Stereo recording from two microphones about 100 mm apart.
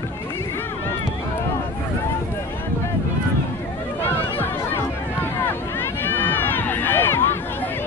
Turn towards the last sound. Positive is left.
turn(degrees=25)  # may be behind; listen again after turning